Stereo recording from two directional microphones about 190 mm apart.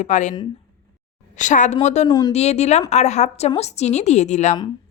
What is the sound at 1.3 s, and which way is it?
A woman's voice, 40° left (ahead or behind).